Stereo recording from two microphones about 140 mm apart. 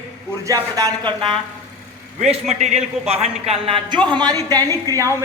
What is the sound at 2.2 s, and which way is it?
A man's voice, 55° right (ahead or behind).